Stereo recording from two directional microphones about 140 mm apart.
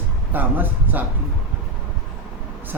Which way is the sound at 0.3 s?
15° right (ahead or behind).